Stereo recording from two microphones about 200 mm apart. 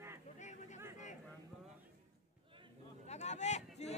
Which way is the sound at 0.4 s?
35° left (ahead or behind).